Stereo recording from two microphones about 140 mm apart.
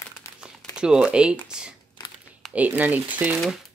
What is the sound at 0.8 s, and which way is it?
Speech, 5° right (ahead or behind).